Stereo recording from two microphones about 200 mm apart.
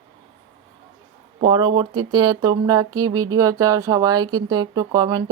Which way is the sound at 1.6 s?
25° right (ahead or behind).